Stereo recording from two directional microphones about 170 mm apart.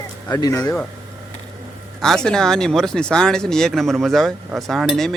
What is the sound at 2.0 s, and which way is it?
Speech, 5° left (ahead or behind).